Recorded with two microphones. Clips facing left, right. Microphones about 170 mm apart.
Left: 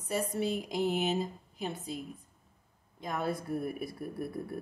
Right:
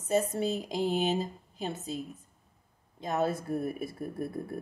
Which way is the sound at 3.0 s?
25° right (ahead or behind).